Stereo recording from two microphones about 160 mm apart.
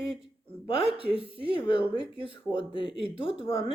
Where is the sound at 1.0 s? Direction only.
35° left (ahead or behind).